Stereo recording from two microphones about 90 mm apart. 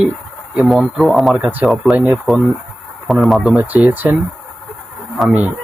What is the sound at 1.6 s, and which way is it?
Speech, 5° right (ahead or behind).